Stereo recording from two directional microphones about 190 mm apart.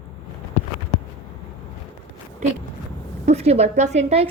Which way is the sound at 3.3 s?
35° right (ahead or behind).